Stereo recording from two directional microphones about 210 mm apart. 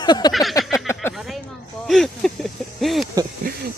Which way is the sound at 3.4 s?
40° right (ahead or behind).